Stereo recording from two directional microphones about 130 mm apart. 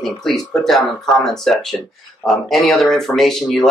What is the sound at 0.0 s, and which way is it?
Speech, 5° left (ahead or behind).